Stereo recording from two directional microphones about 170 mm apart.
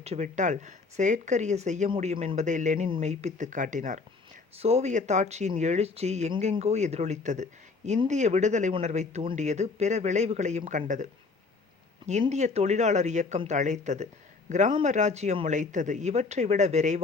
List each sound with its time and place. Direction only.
0.0 s speech: 40° right (ahead or behind)
12.3 s speech: 40° right (ahead or behind)